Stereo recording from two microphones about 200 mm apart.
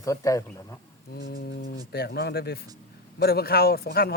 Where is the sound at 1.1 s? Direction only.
45° left (ahead or behind).